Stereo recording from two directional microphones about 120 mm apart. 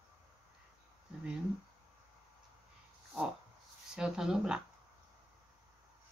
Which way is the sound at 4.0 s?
5° right (ahead or behind).